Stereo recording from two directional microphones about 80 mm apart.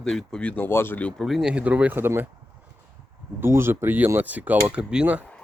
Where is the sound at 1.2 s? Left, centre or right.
Centre; by 2.2 s right.